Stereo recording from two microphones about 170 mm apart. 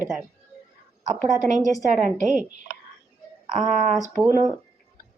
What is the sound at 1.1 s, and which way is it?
Speech, 45° right (ahead or behind).